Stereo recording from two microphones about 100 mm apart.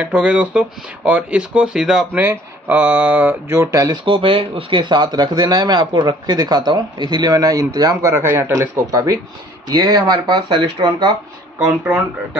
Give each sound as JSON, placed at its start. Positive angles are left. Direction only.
{"t": 0.0, "sound": "speech", "side_deg": -10}
{"t": 2.1, "sound": "speech", "side_deg": -20}
{"t": 3.9, "sound": "speech", "side_deg": -55}
{"t": 8.1, "sound": "speech", "side_deg": -20}
{"t": 11.5, "sound": "speech", "side_deg": -20}